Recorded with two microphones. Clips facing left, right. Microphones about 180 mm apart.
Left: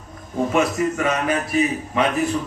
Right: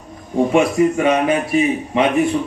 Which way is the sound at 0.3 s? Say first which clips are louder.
Right 5 dB; 25° right (ahead or behind).